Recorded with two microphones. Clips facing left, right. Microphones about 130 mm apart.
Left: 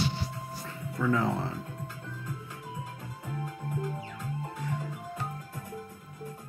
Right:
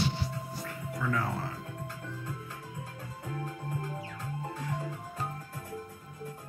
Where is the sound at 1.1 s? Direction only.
20° left (ahead or behind).